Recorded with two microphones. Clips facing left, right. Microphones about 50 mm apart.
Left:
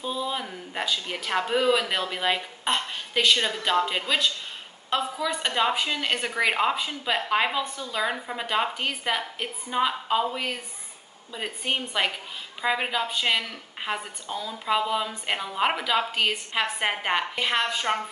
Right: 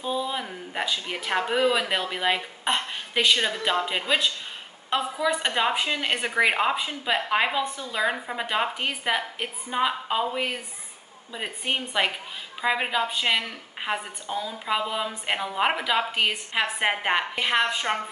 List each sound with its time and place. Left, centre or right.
0.0 s a woman's voice: centre